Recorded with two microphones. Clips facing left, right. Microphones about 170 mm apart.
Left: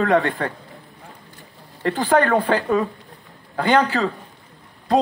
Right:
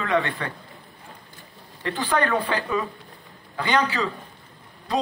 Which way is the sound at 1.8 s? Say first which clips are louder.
Left 6 dB; 50° left (ahead or behind).